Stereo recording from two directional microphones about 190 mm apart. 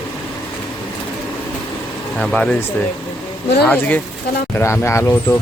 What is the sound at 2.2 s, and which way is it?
Speech, 5° left (ahead or behind).